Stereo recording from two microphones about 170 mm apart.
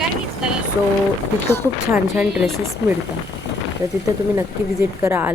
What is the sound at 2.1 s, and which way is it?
Speech, 5° right (ahead or behind).